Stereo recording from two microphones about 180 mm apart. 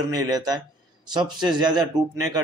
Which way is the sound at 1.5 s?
25° right (ahead or behind).